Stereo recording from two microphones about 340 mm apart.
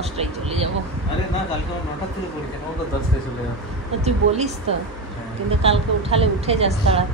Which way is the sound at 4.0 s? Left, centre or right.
Centre.